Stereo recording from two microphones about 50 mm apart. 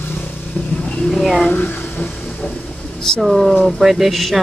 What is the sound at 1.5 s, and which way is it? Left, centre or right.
Speech, left.